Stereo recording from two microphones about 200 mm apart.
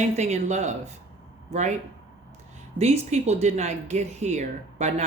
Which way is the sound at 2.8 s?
30° right (ahead or behind).